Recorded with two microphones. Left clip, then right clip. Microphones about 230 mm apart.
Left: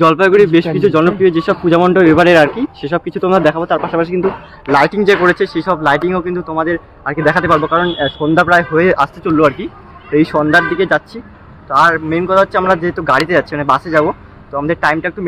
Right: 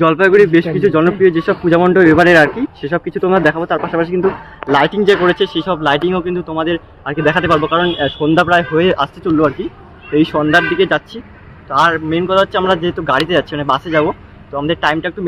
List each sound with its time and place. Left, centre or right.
0.0 s speech: centre
9.2 s a man's voice: left
10.4 s speech: centre